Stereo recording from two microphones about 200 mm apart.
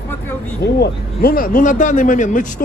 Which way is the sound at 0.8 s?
45° left (ahead or behind).